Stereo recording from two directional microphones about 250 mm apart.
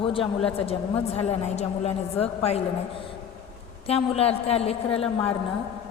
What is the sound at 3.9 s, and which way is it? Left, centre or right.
A woman's voice, left.